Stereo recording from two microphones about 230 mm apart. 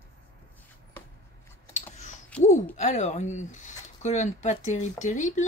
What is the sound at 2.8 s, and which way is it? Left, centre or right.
Speech, left.